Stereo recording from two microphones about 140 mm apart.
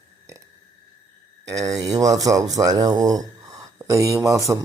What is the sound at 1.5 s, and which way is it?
Speech, 25° right (ahead or behind).